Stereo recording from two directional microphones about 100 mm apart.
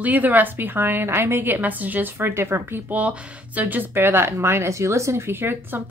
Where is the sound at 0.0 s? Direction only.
15° right (ahead or behind).